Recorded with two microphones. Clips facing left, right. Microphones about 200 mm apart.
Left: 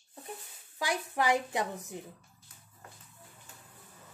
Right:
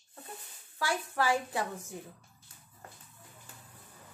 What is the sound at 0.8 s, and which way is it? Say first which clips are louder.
A woman's voice: even; 15° left (ahead or behind).